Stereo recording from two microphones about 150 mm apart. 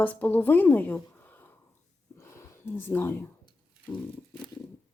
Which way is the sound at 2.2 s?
20° left (ahead or behind).